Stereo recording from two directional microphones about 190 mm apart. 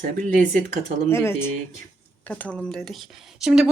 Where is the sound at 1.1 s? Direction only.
10° left (ahead or behind).